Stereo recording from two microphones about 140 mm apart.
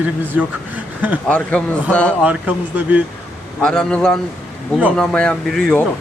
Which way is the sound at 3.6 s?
5° left (ahead or behind).